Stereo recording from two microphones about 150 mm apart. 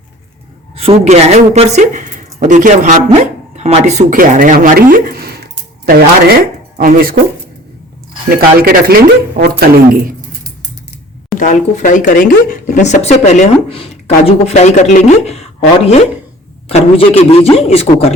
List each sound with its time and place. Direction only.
0.8 s speech: 45° right (ahead or behind); by 6.3 s 90° right
6.7 s speech: 75° right (ahead or behind)
8.4 s speech: 80° right
11.3 s speech: 60° left (ahead or behind)
16.6 s speech: 40° left (ahead or behind)